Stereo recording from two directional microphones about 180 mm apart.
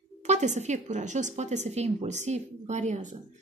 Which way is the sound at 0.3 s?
40° right (ahead or behind).